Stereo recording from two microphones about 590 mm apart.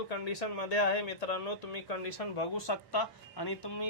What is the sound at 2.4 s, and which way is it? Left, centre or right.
Speech, left.